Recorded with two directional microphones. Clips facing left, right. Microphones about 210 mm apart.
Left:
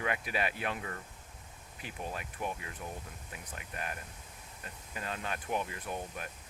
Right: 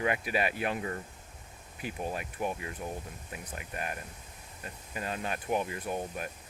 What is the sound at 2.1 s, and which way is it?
Speech, 15° right (ahead or behind).